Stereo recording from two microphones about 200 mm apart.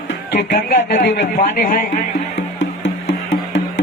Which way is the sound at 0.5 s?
40° left (ahead or behind).